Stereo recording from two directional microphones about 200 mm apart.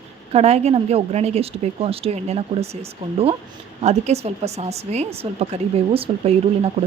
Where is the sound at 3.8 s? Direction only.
35° right (ahead or behind).